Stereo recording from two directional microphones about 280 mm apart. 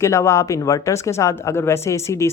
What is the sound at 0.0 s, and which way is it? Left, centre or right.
Speech, centre.